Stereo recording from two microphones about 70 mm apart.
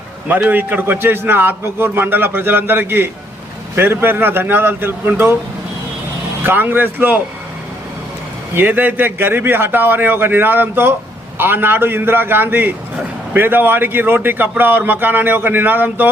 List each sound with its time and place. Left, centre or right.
0.3 s a man's voice: right
6.4 s a man's voice: right
8.5 s a man's voice: right